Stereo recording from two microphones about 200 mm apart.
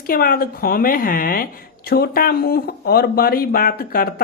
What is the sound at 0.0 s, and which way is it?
Speech, 45° left (ahead or behind).